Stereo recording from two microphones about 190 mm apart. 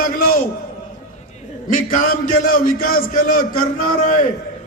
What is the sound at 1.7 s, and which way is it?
A man's voice, 50° left (ahead or behind).